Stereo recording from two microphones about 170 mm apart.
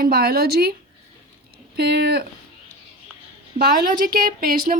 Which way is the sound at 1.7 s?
75° right (ahead or behind).